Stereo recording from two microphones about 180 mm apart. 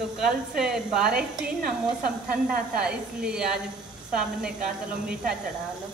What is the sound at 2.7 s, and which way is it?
A woman's voice, 5° right (ahead or behind).